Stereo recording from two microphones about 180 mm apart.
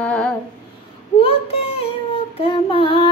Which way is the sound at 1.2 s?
35° left (ahead or behind).